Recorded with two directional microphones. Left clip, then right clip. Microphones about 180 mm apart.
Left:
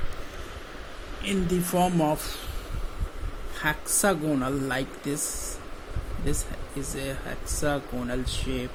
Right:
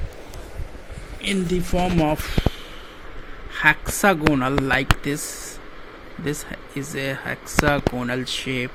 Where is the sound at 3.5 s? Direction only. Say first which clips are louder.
Right 10 dB; 15° right (ahead or behind).